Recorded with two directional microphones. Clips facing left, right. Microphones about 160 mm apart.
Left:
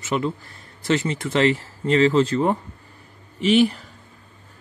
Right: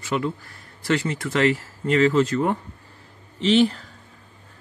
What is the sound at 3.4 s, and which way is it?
Speech, 10° left (ahead or behind).